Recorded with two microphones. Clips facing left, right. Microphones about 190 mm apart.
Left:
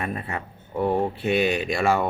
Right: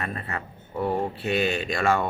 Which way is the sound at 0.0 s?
10° left (ahead or behind).